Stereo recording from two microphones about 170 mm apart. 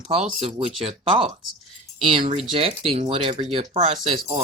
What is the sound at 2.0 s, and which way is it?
Speech, 30° right (ahead or behind).